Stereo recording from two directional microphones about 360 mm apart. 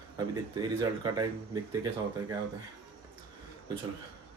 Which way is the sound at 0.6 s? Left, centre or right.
Centre.